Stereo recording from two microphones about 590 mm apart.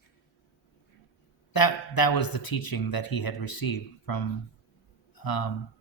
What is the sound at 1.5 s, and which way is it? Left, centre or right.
Speech, left.